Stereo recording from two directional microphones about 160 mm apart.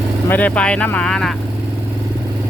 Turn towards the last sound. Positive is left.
turn(degrees=5)  # may be behind; listen again after turning